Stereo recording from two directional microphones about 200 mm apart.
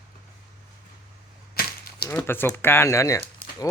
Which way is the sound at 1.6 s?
50° left (ahead or behind).